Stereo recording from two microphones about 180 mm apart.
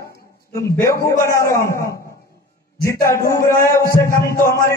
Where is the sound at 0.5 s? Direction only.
15° left (ahead or behind).